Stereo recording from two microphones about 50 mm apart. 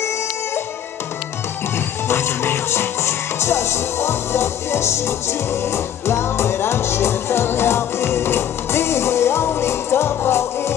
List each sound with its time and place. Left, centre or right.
2.0 s music: left